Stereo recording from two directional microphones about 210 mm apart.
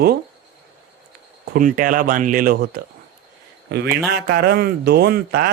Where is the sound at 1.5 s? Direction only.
40° right (ahead or behind).